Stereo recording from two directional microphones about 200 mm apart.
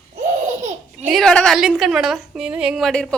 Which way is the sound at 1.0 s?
Centre (ahead or behind).